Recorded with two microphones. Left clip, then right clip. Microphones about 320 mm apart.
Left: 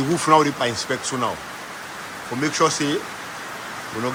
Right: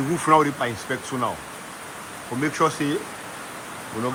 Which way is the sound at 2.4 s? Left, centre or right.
Centre.